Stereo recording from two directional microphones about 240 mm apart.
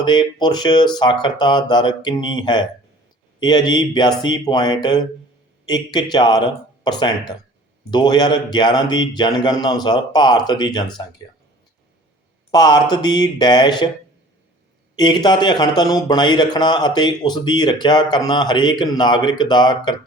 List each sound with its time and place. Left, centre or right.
0.0 s speech: centre
12.5 s speech: centre
14.9 s speech: centre